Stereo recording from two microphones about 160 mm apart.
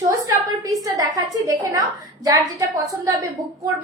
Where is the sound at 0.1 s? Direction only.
20° right (ahead or behind).